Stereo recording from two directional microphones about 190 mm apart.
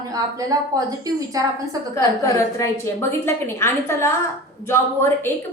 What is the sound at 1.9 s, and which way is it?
A woman's voice, 15° left (ahead or behind).